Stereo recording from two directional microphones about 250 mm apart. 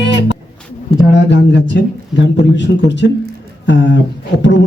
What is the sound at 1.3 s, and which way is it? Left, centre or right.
Speech, left.